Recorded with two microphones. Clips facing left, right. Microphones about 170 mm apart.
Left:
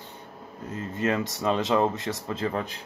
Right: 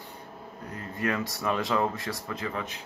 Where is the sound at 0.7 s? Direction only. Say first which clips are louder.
Left 4 dB; 20° left (ahead or behind).